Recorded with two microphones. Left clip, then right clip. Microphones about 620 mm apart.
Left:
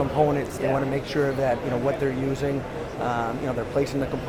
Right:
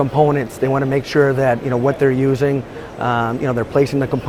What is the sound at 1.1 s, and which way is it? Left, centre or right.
Speech, right.